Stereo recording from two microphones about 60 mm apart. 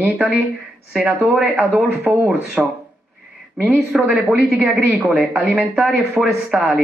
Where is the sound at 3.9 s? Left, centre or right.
Centre.